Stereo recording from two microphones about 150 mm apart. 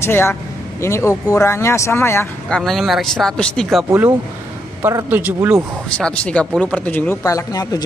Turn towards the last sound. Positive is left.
turn(degrees=25)  # may be behind; listen again after turning